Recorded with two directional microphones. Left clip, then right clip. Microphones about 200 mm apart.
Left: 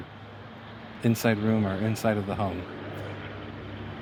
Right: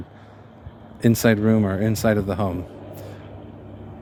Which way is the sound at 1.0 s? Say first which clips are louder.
Right 7 dB; 90° right.